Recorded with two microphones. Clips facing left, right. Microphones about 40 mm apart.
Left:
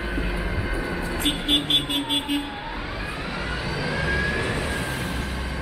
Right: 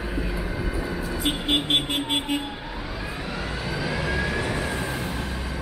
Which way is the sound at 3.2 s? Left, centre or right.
Centre.